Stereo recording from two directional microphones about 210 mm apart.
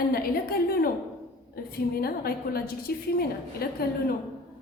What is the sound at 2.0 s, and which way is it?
A woman's voice, 45° left (ahead or behind).